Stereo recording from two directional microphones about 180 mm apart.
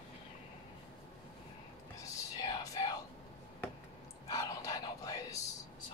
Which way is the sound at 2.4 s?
20° left (ahead or behind).